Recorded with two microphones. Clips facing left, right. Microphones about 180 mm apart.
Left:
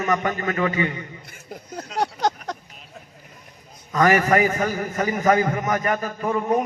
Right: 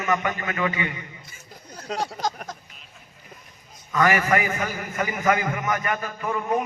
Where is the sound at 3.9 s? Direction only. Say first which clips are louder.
Left 3 dB; 40° left (ahead or behind).